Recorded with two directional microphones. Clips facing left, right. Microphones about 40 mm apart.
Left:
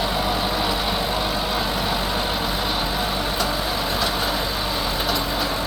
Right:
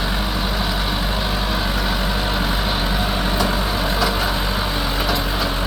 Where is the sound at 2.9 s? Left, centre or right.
Right.